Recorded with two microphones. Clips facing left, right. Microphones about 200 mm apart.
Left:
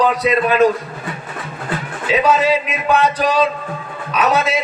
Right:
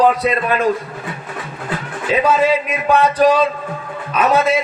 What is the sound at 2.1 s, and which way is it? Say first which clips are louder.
Speech: even; 55° right (ahead or behind).